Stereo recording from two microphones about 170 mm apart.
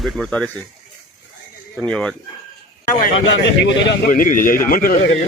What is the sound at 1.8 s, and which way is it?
Speech, 5° left (ahead or behind).